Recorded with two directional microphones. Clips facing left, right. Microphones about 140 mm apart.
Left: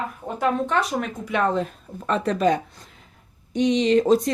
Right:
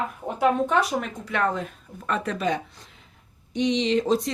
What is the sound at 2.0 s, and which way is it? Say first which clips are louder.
Speech: left 5 dB; 30° left (ahead or behind).